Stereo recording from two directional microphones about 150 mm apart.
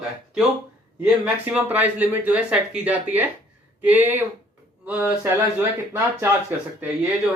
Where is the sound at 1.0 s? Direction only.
10° right (ahead or behind).